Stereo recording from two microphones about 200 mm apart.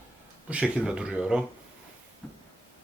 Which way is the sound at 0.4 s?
5° right (ahead or behind).